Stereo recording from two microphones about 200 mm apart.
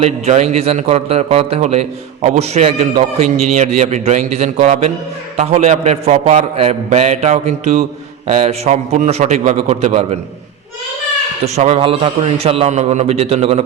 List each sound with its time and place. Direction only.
0.0 s a man's voice: 30° right (ahead or behind)
11.4 s a man's voice: 30° right (ahead or behind)